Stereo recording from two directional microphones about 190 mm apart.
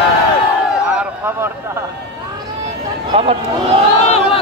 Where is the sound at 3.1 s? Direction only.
30° right (ahead or behind).